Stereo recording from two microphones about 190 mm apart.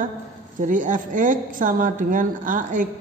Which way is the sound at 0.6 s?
40° right (ahead or behind).